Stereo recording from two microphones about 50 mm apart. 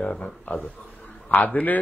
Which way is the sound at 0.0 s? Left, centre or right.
Left.